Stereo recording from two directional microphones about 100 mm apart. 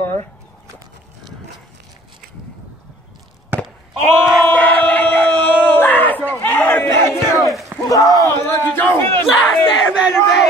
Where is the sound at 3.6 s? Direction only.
Centre (ahead or behind).